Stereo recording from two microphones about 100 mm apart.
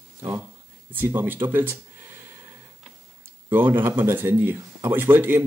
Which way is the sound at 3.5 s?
20° right (ahead or behind).